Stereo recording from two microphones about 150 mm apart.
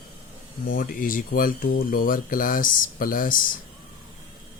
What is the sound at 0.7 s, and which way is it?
Speech, 70° left (ahead or behind).